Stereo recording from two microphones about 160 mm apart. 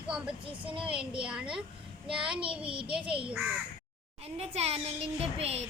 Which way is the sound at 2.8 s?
5° right (ahead or behind).